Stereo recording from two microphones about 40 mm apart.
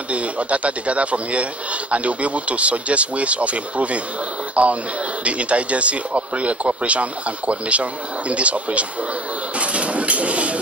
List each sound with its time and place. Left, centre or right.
0.1 s speech: right